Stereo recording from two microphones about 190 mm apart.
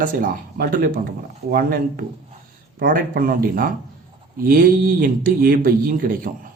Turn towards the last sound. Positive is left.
turn(degrees=-45)  # may be behind; listen again after turning